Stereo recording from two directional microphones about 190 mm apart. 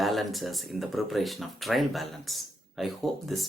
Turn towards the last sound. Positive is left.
turn(degrees=0)  # may be behind; listen again after turning